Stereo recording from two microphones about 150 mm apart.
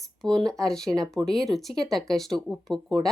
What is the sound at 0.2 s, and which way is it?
Speech, 25° right (ahead or behind).